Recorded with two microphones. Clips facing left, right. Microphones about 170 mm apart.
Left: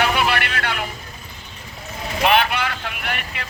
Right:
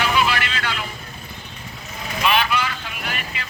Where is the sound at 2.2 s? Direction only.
55° left (ahead or behind).